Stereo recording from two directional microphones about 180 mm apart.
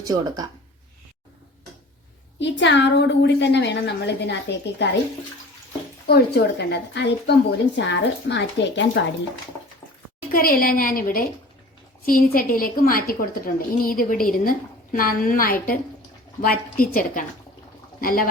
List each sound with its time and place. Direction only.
0.0 s speech: 20° right (ahead or behind)
2.4 s a woman's voice: 80° left
6.1 s a woman's voice: 65° left (ahead or behind)
10.3 s a woman's voice: 55° left (ahead or behind)